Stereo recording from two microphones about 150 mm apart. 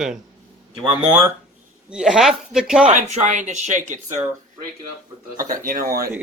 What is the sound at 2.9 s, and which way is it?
Speech, 55° right (ahead or behind).